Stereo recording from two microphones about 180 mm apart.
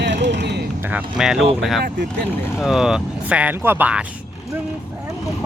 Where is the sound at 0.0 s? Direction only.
75° right (ahead or behind).